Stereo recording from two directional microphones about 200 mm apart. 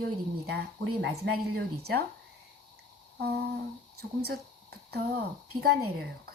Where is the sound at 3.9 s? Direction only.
50° right (ahead or behind).